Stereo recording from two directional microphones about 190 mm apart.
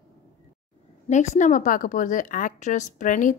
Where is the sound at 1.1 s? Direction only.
40° left (ahead or behind).